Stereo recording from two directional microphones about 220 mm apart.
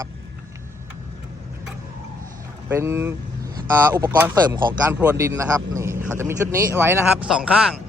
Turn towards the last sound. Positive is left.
turn(degrees=-5)  # may be behind; listen again after turning